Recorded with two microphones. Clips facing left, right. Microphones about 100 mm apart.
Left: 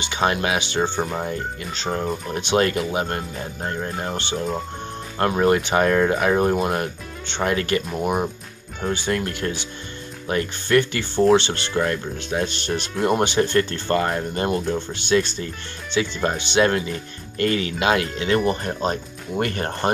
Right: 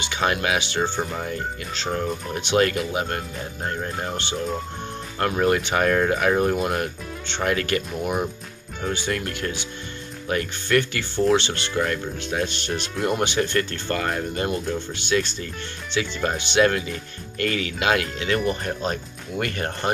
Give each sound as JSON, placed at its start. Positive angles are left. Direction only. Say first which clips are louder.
{"t": 0.0, "sound": "speech", "louder": "left 2 dB", "side_deg": 30}